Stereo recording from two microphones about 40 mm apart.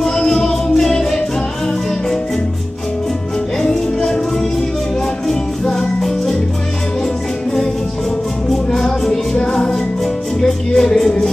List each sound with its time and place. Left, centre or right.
0.3 s music: centre
3.6 s music: centre
5.3 s music: centre
8.5 s music: centre